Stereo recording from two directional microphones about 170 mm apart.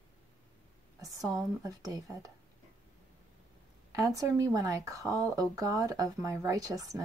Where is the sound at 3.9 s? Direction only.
20° right (ahead or behind).